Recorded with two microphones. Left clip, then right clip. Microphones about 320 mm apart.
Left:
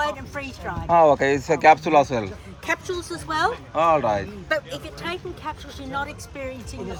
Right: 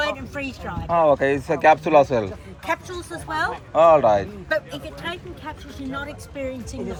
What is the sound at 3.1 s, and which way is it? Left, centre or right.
Speech, left.